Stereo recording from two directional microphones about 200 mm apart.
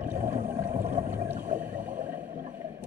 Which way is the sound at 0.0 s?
10° right (ahead or behind).